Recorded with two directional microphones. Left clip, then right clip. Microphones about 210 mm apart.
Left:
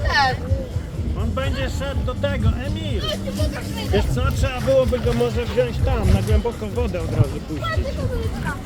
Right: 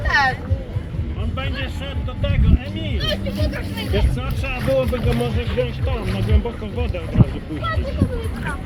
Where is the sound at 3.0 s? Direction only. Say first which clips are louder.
Right 3 dB; 35° right (ahead or behind).